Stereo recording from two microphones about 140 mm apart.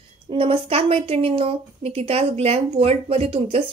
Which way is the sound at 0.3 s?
45° right (ahead or behind).